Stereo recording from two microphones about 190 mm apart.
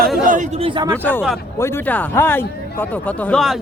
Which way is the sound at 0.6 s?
25° right (ahead or behind).